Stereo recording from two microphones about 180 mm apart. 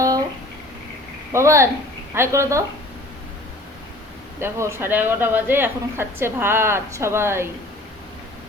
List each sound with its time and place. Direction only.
1.3 s speech: 15° right (ahead or behind)
4.4 s speech: 15° right (ahead or behind)